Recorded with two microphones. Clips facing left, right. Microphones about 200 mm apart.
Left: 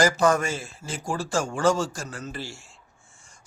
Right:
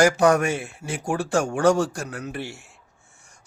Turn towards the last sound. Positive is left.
turn(degrees=-65)  # may be behind; listen again after turning